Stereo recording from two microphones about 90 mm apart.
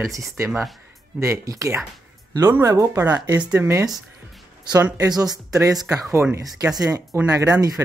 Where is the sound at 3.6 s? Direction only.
30° right (ahead or behind).